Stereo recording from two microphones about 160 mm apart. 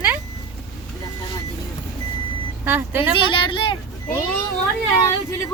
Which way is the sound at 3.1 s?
30° left (ahead or behind).